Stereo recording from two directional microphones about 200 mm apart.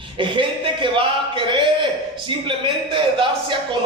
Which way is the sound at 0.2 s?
25° right (ahead or behind).